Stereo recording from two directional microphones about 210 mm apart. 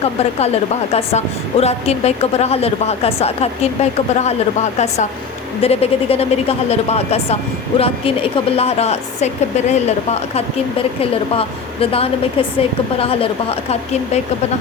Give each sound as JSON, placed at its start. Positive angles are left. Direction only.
{"t": 0.0, "sound": "a woman's voice", "side_deg": 30}